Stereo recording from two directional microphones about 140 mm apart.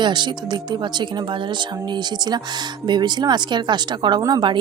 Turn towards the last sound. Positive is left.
turn(degrees=-30)  # may be behind; listen again after turning